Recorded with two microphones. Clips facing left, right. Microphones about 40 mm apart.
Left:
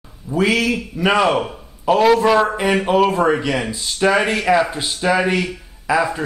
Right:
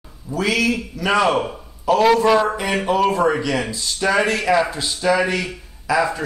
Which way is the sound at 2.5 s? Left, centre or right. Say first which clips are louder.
Left 3 dB; left.